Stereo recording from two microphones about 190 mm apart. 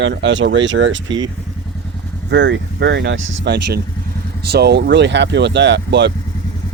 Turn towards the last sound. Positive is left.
turn(degrees=-65)  # may be behind; listen again after turning